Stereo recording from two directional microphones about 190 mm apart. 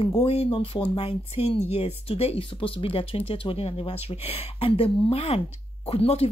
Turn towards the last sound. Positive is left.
turn(degrees=30)  # may be behind; listen again after turning